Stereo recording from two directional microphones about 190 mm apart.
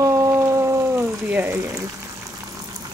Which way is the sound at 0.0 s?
15° right (ahead or behind).